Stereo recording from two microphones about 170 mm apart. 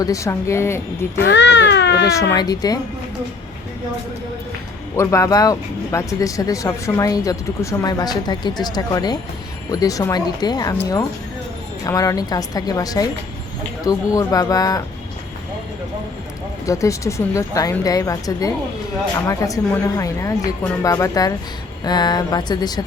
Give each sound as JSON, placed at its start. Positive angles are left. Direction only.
{"t": 0.0, "sound": "a woman's voice", "side_deg": 20}
{"t": 1.2, "sound": "speech", "side_deg": 90}
{"t": 2.3, "sound": "speech", "side_deg": 25}
{"t": 4.9, "sound": "speech", "side_deg": 20}
{"t": 11.9, "sound": "speech", "side_deg": 20}
{"t": 16.6, "sound": "speech", "side_deg": 20}